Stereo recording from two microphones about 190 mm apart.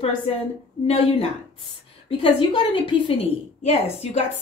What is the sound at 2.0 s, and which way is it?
Speech, 30° left (ahead or behind).